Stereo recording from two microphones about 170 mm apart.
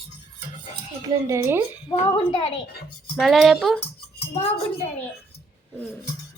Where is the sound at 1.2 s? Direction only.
15° right (ahead or behind).